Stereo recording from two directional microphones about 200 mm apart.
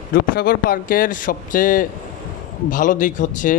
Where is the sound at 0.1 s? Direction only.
50° left (ahead or behind).